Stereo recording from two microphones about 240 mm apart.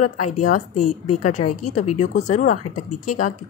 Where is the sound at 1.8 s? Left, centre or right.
Left.